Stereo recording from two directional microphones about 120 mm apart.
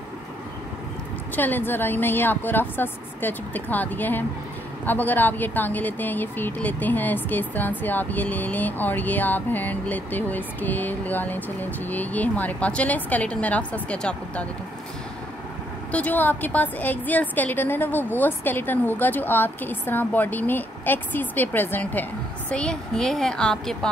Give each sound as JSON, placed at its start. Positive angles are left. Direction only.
{"t": 1.3, "sound": "a woman's voice", "side_deg": 15}
{"t": 15.9, "sound": "a woman's voice", "side_deg": 15}